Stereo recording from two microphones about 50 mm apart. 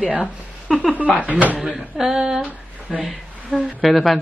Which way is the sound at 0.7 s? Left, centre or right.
Centre.